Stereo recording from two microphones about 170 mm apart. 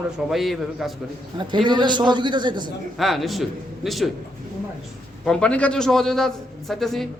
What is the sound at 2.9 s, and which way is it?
A man's voice, centre (ahead or behind).